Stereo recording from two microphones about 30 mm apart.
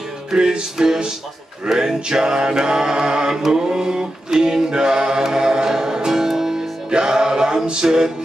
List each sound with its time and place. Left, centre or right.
0.3 s mantra: right
5.2 s music: centre